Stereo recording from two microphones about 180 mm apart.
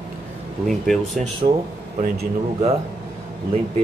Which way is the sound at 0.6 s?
Centre (ahead or behind).